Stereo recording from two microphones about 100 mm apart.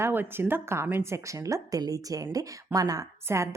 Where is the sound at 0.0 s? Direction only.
20° right (ahead or behind).